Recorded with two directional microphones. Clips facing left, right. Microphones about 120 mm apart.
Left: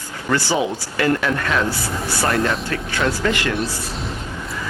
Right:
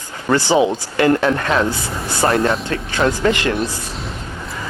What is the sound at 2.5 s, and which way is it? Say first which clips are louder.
Speech: right 3 dB; 30° right (ahead or behind).